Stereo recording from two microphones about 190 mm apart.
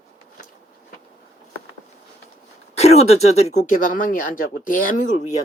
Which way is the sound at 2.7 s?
35° left (ahead or behind).